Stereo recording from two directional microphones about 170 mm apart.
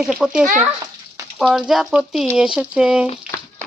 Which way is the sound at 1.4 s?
5° right (ahead or behind).